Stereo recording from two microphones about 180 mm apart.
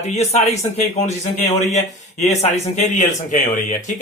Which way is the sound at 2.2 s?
40° left (ahead or behind).